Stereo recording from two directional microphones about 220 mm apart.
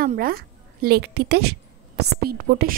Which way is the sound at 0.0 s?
45° right (ahead or behind).